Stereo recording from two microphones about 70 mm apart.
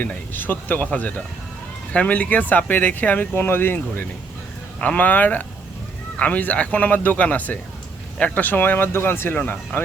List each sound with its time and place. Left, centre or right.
0.0 s speech: left